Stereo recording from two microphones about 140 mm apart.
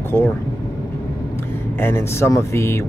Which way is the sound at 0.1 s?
15° left (ahead or behind).